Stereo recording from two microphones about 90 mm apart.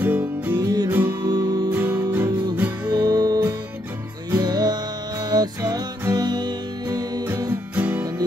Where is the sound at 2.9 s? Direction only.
50° right (ahead or behind).